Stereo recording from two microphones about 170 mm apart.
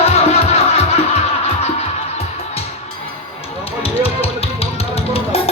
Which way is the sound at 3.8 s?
35° left (ahead or behind).